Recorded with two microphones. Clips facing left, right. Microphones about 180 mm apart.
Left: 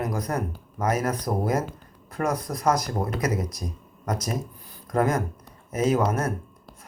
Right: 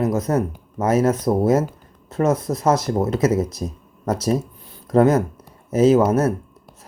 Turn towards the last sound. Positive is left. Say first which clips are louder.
# right 8 dB
turn(degrees=-25)  # may be behind; listen again after turning